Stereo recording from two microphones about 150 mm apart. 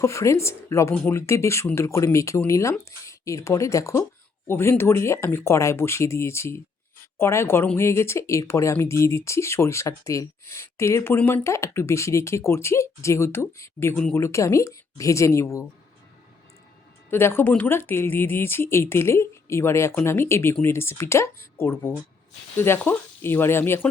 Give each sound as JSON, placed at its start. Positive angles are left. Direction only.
{"t": 0.0, "sound": "speech", "side_deg": 20}
{"t": 17.1, "sound": "speech", "side_deg": 15}